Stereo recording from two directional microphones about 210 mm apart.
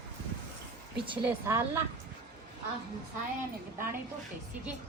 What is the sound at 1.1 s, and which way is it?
Speech, 10° right (ahead or behind).